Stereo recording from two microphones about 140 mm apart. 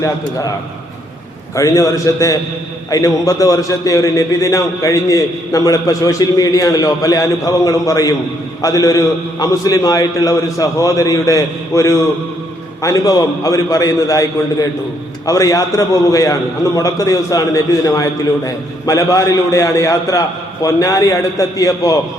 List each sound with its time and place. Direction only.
1.5 s a man's voice: 25° left (ahead or behind)